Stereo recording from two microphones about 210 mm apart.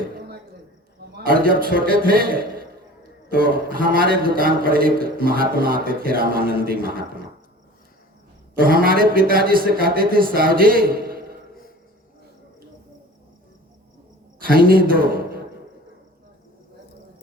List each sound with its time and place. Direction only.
1.1 s a man's voice: 45° right (ahead or behind)
8.6 s a man's voice: 45° right (ahead or behind)
14.4 s a man's voice: 45° right (ahead or behind)